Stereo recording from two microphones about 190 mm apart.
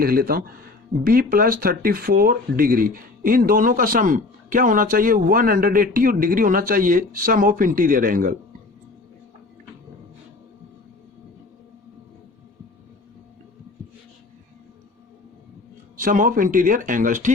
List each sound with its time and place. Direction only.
0.0 s speech: 50° right (ahead or behind)
16.0 s speech: 45° right (ahead or behind)